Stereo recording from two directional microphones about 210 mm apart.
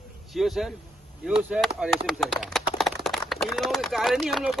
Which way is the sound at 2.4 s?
Centre (ahead or behind).